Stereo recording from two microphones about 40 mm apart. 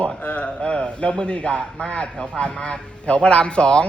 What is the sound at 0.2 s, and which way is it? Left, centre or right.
A man's voice, left.